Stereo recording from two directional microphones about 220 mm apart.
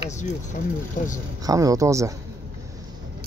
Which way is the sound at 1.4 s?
15° right (ahead or behind).